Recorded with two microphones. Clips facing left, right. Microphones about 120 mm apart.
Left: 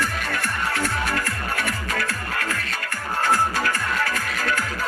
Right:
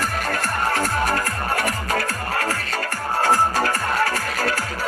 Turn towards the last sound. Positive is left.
turn(degrees=-35)  # may be behind; listen again after turning